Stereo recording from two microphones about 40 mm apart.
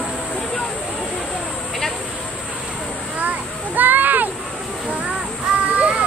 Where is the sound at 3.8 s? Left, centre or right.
Right.